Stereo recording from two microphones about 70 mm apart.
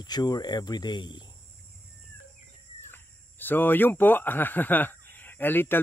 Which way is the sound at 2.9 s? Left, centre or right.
Left.